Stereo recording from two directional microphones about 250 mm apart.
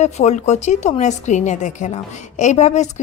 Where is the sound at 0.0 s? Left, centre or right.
Left.